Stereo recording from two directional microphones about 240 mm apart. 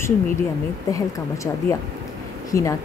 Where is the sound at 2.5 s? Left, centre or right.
Centre.